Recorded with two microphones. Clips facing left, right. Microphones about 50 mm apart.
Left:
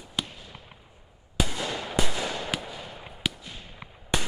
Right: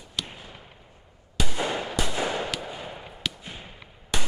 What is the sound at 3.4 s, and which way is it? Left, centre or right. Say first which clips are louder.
Fireworks: right 2 dB; right.